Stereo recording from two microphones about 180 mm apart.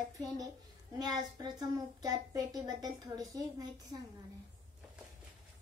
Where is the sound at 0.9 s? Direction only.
20° right (ahead or behind).